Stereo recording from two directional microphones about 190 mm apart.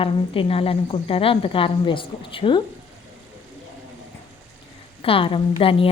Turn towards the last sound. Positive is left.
turn(degrees=30)  # may be behind; listen again after turning